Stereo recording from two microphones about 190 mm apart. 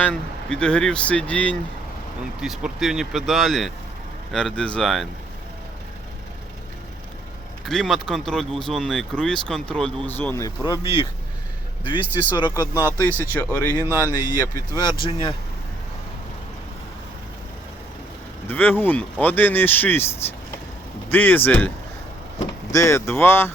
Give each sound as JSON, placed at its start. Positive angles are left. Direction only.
{"t": 0.0, "sound": "speech", "side_deg": 5}
{"t": 7.6, "sound": "speech", "side_deg": 0}
{"t": 13.0, "sound": "speech", "side_deg": 10}
{"t": 14.1, "sound": "speech", "side_deg": 20}
{"t": 18.4, "sound": "speech", "side_deg": 10}
{"t": 21.1, "sound": "speech", "side_deg": 10}
{"t": 22.7, "sound": "speech", "side_deg": 15}